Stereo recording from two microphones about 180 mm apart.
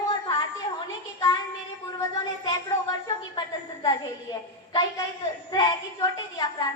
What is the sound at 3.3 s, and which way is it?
A woman's voice, 25° left (ahead or behind).